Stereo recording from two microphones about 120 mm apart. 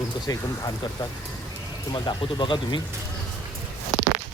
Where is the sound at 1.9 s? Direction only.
40° left (ahead or behind).